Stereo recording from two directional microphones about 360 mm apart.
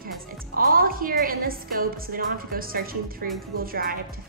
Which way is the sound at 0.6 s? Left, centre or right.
Right.